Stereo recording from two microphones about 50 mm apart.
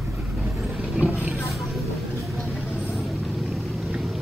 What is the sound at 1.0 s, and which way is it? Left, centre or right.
Vehicle, right.